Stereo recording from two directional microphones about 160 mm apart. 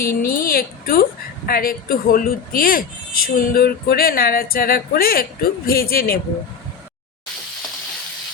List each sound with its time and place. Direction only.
0.0 s a woman's voice: 65° left (ahead or behind)